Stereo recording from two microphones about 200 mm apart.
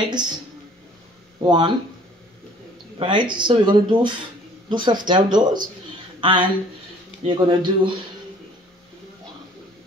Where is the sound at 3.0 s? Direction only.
25° right (ahead or behind).